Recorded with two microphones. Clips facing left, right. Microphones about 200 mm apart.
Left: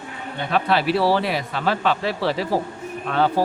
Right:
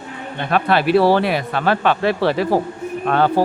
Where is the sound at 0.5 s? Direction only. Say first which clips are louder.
Right 5 dB; 60° right (ahead or behind).